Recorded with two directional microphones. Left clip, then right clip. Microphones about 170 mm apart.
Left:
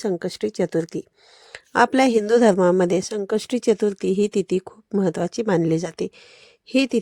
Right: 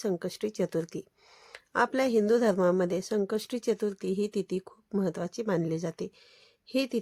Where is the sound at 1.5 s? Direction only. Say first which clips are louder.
Left 10 dB; 45° left (ahead or behind).